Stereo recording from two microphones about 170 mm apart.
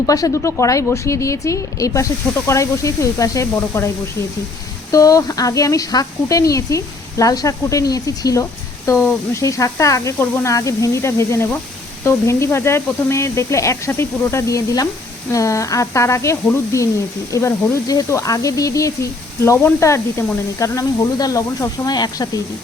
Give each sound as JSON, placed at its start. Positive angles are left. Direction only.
{"t": 0.0, "sound": "a woman's voice", "side_deg": 20}